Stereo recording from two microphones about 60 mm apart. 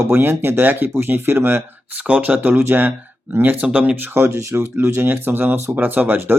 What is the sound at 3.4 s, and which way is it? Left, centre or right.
Speech, right.